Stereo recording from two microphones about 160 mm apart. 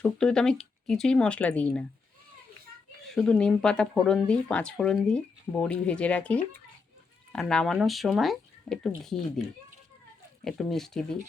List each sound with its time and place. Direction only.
0.0 s speech: 5° left (ahead or behind)
3.1 s speech: 5° left (ahead or behind)
10.4 s speech: centre (ahead or behind)